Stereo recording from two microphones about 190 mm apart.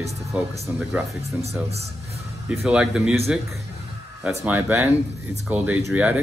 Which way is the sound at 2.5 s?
5° right (ahead or behind).